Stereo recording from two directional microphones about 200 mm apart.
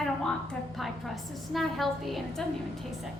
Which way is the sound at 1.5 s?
Centre (ahead or behind).